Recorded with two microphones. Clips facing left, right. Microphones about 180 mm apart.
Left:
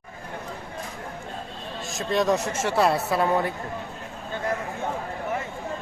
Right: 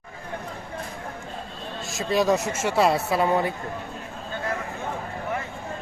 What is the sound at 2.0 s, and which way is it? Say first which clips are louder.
Speech: right 1 dB; 5° right (ahead or behind).